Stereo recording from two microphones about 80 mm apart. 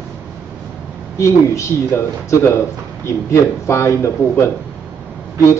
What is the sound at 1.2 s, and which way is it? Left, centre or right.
A man's voice, left.